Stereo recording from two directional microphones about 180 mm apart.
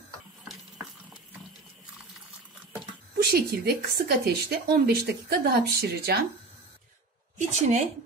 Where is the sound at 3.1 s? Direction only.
65° right (ahead or behind).